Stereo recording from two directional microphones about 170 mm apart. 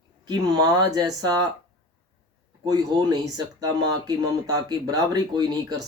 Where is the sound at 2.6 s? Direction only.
25° right (ahead or behind).